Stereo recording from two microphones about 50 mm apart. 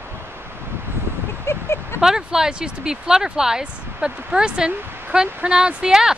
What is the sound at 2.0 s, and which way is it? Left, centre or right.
Speech, centre.